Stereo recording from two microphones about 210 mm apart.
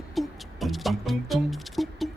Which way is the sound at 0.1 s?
Centre (ahead or behind).